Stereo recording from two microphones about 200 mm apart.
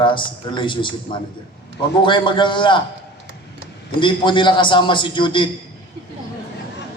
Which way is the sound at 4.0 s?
25° left (ahead or behind).